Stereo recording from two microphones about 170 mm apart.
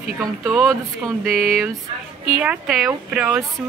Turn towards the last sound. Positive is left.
turn(degrees=-10)  # may be behind; listen again after turning